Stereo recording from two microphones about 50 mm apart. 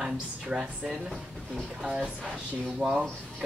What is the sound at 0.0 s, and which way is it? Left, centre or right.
Speech, centre.